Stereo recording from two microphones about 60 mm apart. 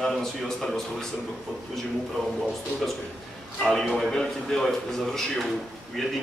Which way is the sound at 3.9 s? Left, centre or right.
Centre.